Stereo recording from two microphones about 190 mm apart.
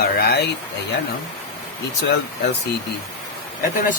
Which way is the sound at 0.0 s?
55° left (ahead or behind).